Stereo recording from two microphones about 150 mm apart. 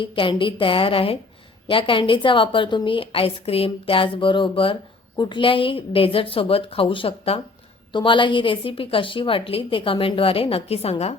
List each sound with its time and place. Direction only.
0.0 s a woman's voice: 35° left (ahead or behind)